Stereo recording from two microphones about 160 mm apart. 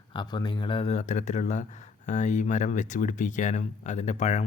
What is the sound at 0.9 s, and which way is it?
Speech, 50° left (ahead or behind).